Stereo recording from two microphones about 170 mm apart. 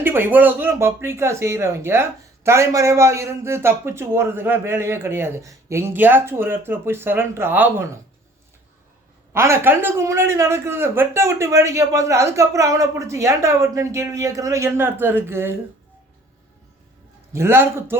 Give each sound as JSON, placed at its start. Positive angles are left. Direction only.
{"t": 0.0, "sound": "speech", "side_deg": -10}
{"t": 9.3, "sound": "speech", "side_deg": -15}
{"t": 17.3, "sound": "speech", "side_deg": -15}